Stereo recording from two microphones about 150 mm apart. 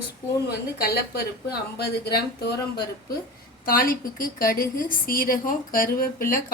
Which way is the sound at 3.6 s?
70° left (ahead or behind).